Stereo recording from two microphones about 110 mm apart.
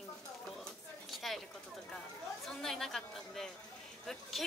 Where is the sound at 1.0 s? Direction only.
Centre (ahead or behind).